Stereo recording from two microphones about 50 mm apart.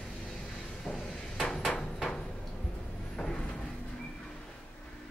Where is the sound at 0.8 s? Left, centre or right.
Centre.